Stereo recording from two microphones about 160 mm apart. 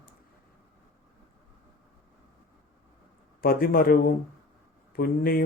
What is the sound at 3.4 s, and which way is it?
Speech, 65° left (ahead or behind).